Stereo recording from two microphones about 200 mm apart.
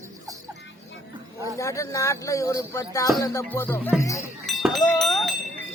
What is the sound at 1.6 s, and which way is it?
Speech, 15° left (ahead or behind).